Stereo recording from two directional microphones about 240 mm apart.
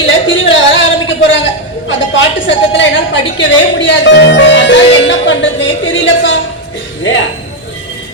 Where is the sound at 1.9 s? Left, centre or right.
Left.